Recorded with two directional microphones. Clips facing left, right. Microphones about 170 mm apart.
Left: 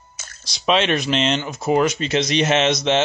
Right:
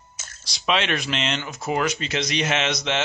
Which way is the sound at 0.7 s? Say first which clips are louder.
Left 5 dB; 30° left (ahead or behind).